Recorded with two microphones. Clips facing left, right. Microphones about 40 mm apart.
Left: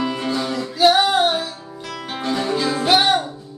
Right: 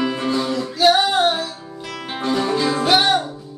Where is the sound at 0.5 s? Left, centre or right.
Centre.